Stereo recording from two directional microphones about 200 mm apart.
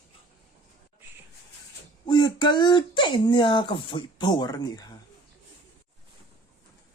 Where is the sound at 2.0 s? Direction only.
20° left (ahead or behind).